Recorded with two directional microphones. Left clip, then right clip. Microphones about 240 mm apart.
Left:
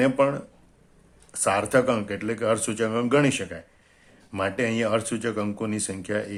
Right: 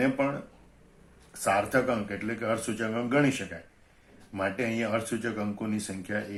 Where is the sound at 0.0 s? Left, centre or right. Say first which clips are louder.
Left 6 dB; left.